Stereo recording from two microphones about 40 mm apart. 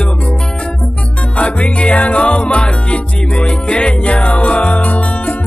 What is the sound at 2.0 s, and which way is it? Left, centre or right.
Music, left.